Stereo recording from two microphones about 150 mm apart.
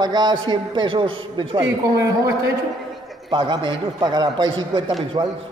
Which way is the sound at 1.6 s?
20° right (ahead or behind).